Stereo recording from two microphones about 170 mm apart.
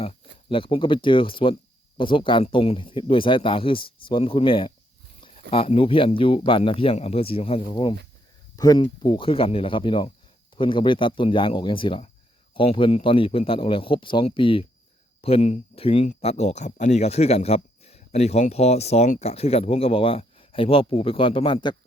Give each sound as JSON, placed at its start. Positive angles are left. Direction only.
{"t": 0.0, "sound": "speech", "side_deg": 35}